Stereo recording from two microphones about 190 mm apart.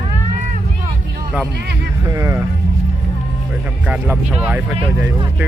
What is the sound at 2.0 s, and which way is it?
Speech, 15° right (ahead or behind).